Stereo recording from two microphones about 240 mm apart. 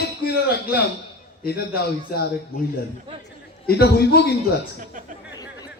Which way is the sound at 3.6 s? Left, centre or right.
Left.